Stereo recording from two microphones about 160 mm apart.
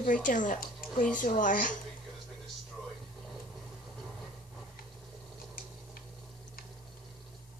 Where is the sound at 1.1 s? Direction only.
55° left (ahead or behind).